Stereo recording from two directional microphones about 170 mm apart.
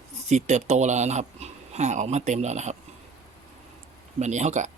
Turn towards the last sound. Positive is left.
turn(degrees=-45)  # may be behind; listen again after turning